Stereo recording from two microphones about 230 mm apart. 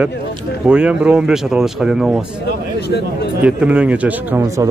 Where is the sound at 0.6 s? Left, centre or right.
Centre.